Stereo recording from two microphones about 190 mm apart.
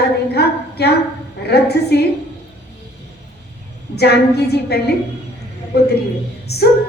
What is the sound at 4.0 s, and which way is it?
Speech, 60° left (ahead or behind).